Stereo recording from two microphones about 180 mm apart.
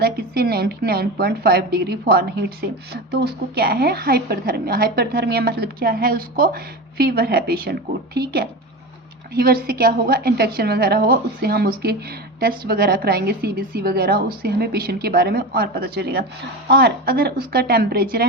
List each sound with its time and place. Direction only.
0.0 s a woman's voice: 60° right (ahead or behind)